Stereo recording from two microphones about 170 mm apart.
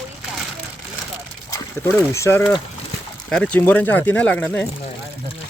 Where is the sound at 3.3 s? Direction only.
5° left (ahead or behind).